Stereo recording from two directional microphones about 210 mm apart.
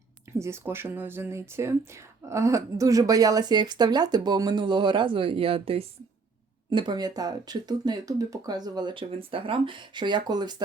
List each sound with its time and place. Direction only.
0.3 s speech: 10° right (ahead or behind)